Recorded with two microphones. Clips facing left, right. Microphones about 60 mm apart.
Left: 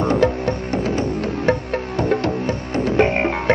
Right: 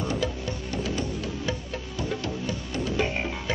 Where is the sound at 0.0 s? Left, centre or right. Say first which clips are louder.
Left 11 dB; left.